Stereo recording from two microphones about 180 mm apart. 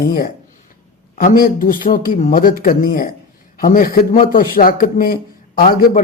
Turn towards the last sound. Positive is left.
turn(degrees=50)  # may be behind; listen again after turning